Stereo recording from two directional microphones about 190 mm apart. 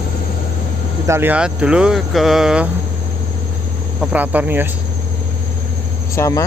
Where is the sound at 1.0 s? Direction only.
10° right (ahead or behind).